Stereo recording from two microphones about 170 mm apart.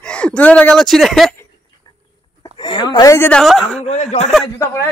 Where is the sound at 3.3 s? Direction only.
Centre (ahead or behind).